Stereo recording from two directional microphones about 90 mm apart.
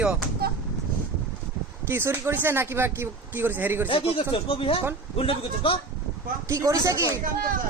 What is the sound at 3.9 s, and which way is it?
A man's voice, 90° left.